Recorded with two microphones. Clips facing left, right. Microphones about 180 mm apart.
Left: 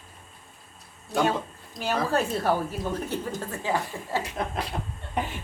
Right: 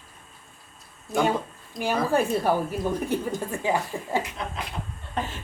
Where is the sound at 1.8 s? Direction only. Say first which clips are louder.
Right 3 dB; centre (ahead or behind).